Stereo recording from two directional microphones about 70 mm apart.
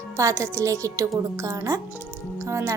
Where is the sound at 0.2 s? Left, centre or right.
Right.